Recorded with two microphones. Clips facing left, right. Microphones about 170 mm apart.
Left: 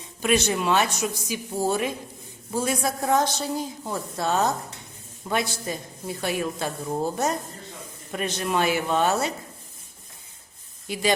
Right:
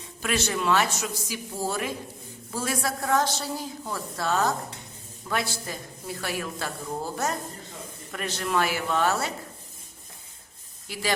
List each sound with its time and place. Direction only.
0.2 s a woman's voice: 20° left (ahead or behind)
10.8 s speech: 20° left (ahead or behind)